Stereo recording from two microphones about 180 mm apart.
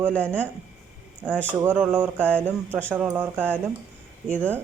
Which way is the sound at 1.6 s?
5° right (ahead or behind).